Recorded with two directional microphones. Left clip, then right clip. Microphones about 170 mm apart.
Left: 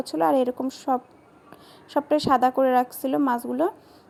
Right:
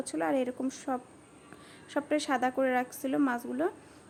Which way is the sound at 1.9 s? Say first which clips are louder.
Left 9 dB; 25° left (ahead or behind).